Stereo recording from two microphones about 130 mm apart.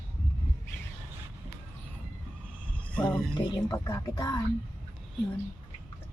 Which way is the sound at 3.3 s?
25° left (ahead or behind).